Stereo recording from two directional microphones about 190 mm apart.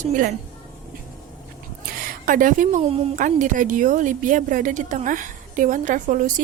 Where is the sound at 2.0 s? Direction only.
45° right (ahead or behind).